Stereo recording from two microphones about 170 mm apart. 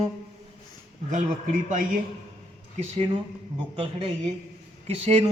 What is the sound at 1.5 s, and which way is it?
Speech, 45° right (ahead or behind).